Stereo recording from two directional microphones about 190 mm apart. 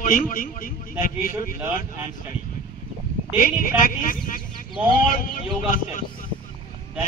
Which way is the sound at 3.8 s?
45° left (ahead or behind).